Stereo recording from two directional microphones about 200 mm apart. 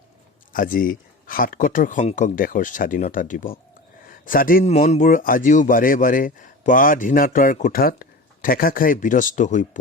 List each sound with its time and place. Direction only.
0.5 s a man's voice: 45° left (ahead or behind)